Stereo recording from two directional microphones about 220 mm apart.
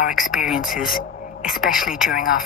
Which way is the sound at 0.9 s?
40° left (ahead or behind).